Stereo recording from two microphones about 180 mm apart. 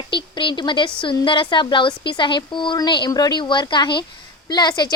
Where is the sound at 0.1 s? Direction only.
25° left (ahead or behind).